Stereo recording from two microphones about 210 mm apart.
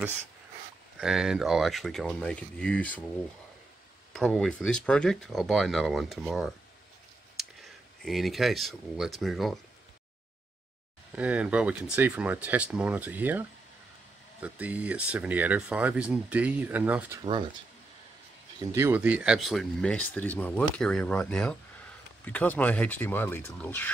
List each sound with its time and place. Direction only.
0.9 s speech: centre (ahead or behind)
4.1 s speech: centre (ahead or behind)
11.1 s speech: 5° right (ahead or behind)
17.2 s speech: 20° right (ahead or behind)
18.6 s speech: 15° right (ahead or behind); by 23.9 s 10° left (ahead or behind)